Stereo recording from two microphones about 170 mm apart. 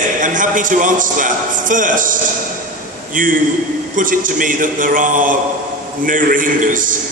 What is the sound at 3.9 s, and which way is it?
A man's voice, 50° right (ahead or behind).